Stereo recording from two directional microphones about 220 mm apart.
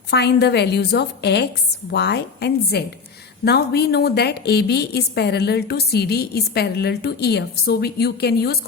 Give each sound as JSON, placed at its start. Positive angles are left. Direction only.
{"t": 0.1, "sound": "a woman's voice", "side_deg": 50}